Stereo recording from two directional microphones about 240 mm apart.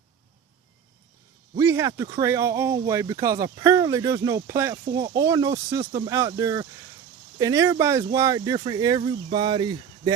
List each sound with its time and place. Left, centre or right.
1.5 s speech: centre